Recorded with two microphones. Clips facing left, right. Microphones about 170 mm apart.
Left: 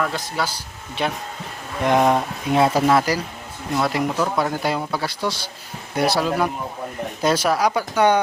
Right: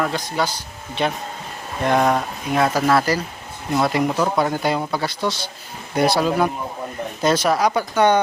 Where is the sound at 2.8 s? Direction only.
15° left (ahead or behind).